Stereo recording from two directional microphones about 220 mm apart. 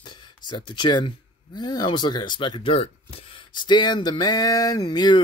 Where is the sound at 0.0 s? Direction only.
20° left (ahead or behind).